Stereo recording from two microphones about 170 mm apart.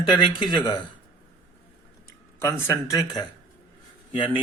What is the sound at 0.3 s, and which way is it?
Speech, 25° left (ahead or behind).